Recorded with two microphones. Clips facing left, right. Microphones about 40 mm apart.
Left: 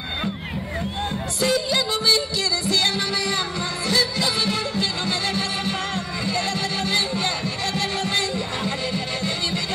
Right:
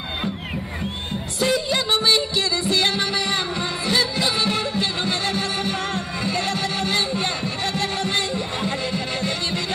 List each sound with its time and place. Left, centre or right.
1.4 s music: right